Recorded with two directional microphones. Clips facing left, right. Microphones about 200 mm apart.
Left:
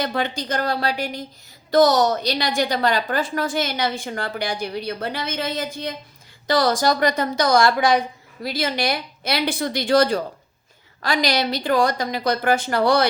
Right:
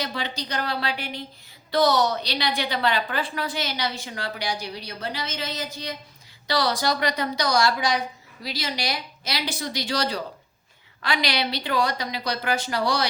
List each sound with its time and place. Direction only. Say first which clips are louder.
0.0 s a woman's voice: left 6 dB; 50° left (ahead or behind)